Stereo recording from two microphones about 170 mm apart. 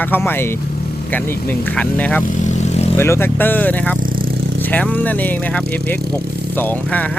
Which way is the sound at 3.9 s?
55° right (ahead or behind).